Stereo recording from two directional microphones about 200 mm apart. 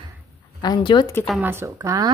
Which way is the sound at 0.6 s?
20° left (ahead or behind).